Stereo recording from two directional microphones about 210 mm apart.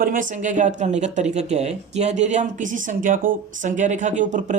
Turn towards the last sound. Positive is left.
turn(degrees=-35)  # may be behind; listen again after turning